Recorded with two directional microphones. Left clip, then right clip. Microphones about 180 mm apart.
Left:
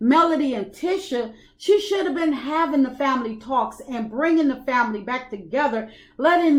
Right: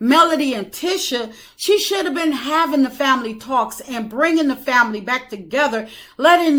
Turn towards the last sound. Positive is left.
turn(degrees=-20)  # may be behind; listen again after turning